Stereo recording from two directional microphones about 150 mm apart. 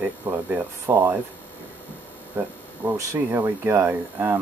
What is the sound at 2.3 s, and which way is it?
Speech, 15° right (ahead or behind).